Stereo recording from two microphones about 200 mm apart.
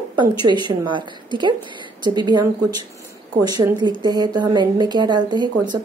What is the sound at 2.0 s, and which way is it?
A woman's voice, 20° right (ahead or behind).